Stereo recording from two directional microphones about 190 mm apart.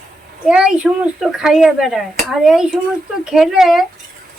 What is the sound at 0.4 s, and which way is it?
Speech, 5° right (ahead or behind).